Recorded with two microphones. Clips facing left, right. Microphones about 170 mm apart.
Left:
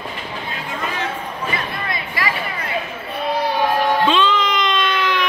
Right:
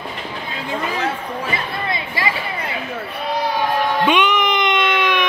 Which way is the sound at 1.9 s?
25° right (ahead or behind).